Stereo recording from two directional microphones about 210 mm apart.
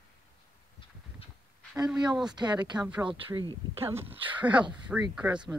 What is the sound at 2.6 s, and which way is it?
Speech, 20° right (ahead or behind).